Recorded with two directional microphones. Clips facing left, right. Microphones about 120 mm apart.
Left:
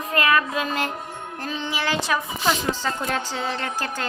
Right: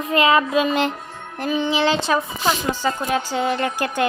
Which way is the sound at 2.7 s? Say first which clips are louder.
Right 4 dB; 15° right (ahead or behind).